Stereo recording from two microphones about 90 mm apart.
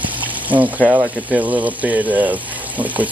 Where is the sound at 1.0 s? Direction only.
15° right (ahead or behind).